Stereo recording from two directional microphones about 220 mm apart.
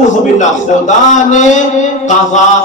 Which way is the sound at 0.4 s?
35° left (ahead or behind).